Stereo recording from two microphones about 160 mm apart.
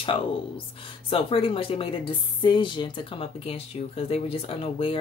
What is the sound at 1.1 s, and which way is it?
Speech, 35° left (ahead or behind).